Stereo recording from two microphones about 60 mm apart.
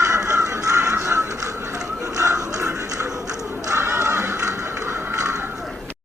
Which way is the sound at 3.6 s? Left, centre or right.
Right.